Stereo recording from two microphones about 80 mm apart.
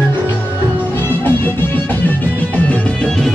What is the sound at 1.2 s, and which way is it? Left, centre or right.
Music, left.